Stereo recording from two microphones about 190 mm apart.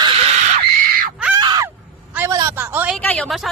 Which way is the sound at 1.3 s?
20° right (ahead or behind).